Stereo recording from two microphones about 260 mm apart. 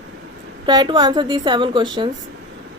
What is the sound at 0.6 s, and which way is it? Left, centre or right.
A woman's voice, centre.